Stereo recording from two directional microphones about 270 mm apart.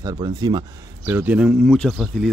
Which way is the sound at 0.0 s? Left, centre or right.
Centre.